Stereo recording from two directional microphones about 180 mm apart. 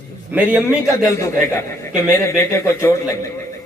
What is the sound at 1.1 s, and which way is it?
A man's voice, 15° left (ahead or behind).